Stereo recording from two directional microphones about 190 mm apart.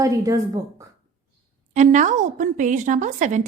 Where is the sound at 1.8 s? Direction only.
40° right (ahead or behind).